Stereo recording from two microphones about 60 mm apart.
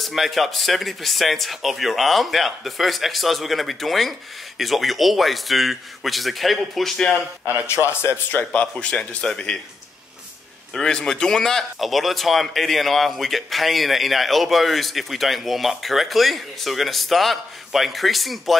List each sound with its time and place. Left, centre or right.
0.0 s a man's voice: centre
7.6 s a man's voice: left
8.5 s speech: centre
10.7 s a man's voice: centre